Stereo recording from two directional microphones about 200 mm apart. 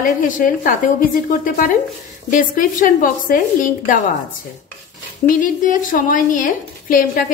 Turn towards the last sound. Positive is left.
turn(degrees=45)  # may be behind; listen again after turning